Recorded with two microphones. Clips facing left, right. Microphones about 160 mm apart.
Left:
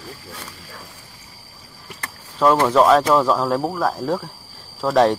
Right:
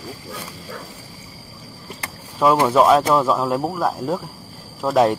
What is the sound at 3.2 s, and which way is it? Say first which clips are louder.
Speech: left 1 dB; 5° right (ahead or behind).